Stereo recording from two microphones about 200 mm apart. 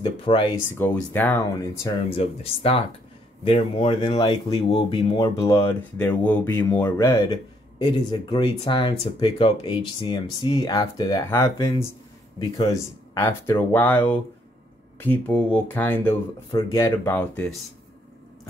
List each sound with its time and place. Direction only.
0.0 s speech: 25° left (ahead or behind)
0.7 s speech: 10° left (ahead or behind)
2.1 s speech: 30° left (ahead or behind); by 17.6 s 5° left (ahead or behind)